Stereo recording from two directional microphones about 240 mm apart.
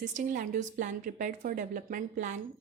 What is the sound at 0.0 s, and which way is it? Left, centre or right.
A woman's voice, right.